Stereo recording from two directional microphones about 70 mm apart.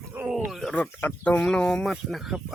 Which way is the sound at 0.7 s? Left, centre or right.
Left.